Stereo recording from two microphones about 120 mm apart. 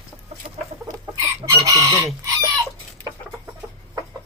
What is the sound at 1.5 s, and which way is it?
Chicken, 30° right (ahead or behind).